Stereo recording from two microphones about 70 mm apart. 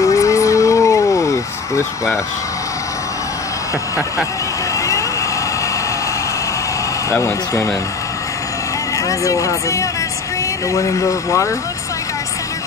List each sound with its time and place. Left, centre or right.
0.0 s vehicle: left
7.1 s speech: left
8.9 s speech: left